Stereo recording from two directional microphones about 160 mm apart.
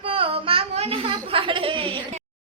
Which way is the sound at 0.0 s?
35° right (ahead or behind).